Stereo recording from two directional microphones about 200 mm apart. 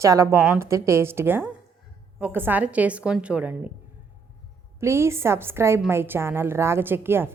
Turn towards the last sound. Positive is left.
turn(degrees=-10)  # may be behind; listen again after turning